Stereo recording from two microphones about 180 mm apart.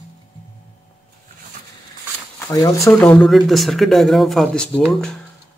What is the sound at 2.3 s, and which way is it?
Speech, 15° left (ahead or behind).